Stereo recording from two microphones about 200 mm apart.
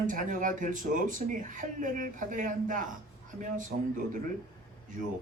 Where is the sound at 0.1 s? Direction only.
40° right (ahead or behind).